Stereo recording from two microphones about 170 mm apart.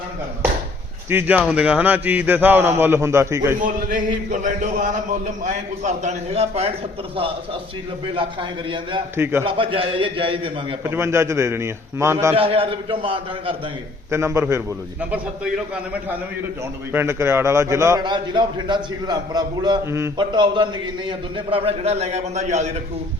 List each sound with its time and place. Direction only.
1.1 s a man's voice: 10° right (ahead or behind)
3.6 s a man's voice: 50° right (ahead or behind)
8.1 s a man's voice: 30° right (ahead or behind)
9.1 s a man's voice: 15° right (ahead or behind)
9.4 s a man's voice: 30° right (ahead or behind)
10.8 s a man's voice: 15° right (ahead or behind)
12.3 s a man's voice: 35° right (ahead or behind)
14.1 s a man's voice: 15° right (ahead or behind)
16.9 s a man's voice: 15° right (ahead or behind)
18.0 s a man's voice: 25° right (ahead or behind)